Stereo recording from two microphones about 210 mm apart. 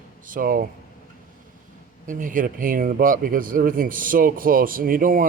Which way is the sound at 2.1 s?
40° right (ahead or behind).